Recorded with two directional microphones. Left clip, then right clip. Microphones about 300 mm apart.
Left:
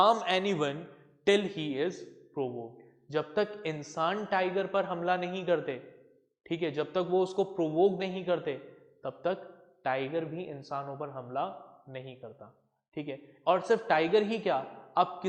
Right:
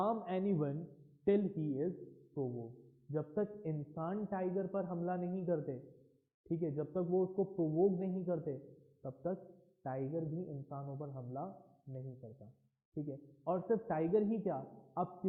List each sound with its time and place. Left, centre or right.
0.2 s a man's voice: centre
2.3 s a man's voice: left
3.1 s a man's voice: centre
7.1 s a man's voice: centre
7.9 s a man's voice: centre
13.1 s a man's voice: centre